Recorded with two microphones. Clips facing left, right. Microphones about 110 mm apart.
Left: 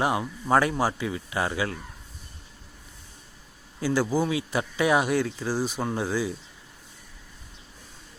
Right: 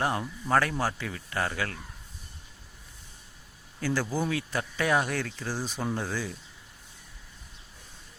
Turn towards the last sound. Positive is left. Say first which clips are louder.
# left 4 dB
turn(degrees=10)  # may be behind; listen again after turning